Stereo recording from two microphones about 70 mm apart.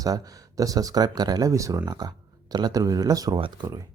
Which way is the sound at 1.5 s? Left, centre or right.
Right.